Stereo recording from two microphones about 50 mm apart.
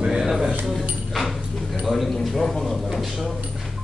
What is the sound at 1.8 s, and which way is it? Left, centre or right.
Speech, centre.